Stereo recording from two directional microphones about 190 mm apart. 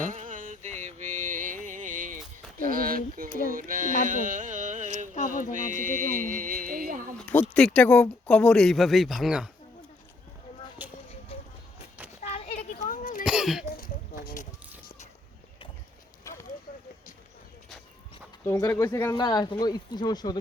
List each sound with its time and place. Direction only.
0.1 s music: 45° right (ahead or behind)
3.5 s carnatic music: 45° right (ahead or behind)
5.5 s music: 45° right (ahead or behind)
7.2 s speech: 10° left (ahead or behind)
10.8 s a sound: 10° right (ahead or behind)
11.3 s music: 30° left (ahead or behind)
12.2 s a sound: 35° left (ahead or behind)
13.2 s throat clearing: 5° right (ahead or behind)
13.7 s a sound: 50° left (ahead or behind)
16.2 s a sound: 15° left (ahead or behind)
18.4 s speech: 15° left (ahead or behind)
19.1 s speech: 20° left (ahead or behind)